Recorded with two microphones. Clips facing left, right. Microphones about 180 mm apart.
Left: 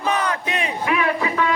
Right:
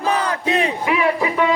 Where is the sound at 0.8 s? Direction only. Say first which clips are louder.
Right 3 dB; 20° right (ahead or behind).